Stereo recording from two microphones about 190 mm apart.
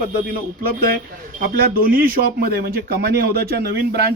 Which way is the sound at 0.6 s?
50° right (ahead or behind).